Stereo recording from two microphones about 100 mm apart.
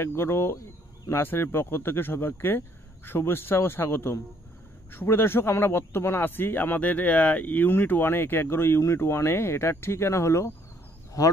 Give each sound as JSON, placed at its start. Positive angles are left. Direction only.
{"t": 0.0, "sound": "a man's voice", "side_deg": 25}